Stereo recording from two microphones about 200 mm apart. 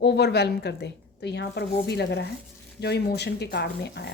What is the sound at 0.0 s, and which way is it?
A woman's voice, 55° left (ahead or behind).